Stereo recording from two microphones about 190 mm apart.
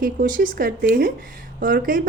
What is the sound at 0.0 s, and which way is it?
Speech, 45° right (ahead or behind).